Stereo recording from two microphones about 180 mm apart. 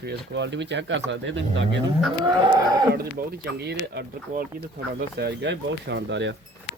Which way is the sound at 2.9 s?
60° right (ahead or behind).